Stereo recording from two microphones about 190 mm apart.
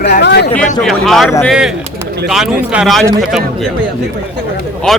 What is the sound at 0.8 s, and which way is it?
Speech, centre (ahead or behind).